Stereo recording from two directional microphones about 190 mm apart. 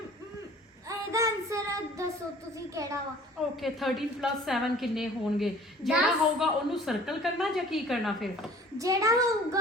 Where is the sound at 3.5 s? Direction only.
Centre (ahead or behind).